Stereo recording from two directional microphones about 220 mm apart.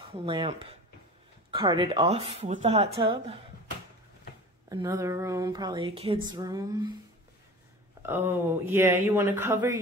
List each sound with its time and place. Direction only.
0.1 s speech: 20° right (ahead or behind)
4.6 s speech: 15° right (ahead or behind)
8.0 s speech: 10° right (ahead or behind)